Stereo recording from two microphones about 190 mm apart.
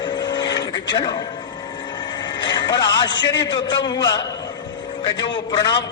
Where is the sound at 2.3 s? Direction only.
25° left (ahead or behind).